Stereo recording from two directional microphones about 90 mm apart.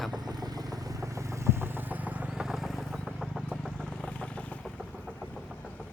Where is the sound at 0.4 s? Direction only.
45° right (ahead or behind); by 3.7 s 5° right (ahead or behind).